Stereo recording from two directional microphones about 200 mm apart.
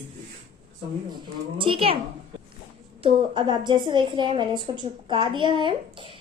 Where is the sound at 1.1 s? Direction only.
25° right (ahead or behind).